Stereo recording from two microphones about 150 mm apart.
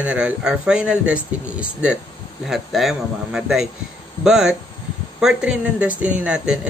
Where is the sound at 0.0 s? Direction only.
10° right (ahead or behind).